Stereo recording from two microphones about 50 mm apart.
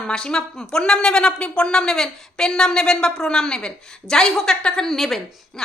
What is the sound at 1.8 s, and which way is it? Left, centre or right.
A woman's voice, centre.